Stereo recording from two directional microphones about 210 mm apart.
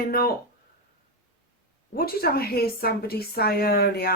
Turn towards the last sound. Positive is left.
turn(degrees=45)  # may be behind; listen again after turning